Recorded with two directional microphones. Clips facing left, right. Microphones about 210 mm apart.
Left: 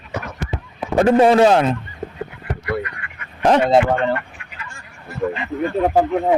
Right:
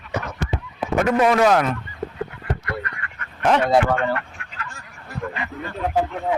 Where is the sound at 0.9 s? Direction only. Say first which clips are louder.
Left 5 dB; 30° left (ahead or behind).